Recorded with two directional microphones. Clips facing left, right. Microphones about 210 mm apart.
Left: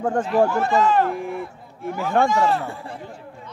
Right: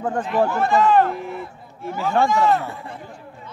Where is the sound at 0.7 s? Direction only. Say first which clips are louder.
Right 3 dB; 55° right (ahead or behind).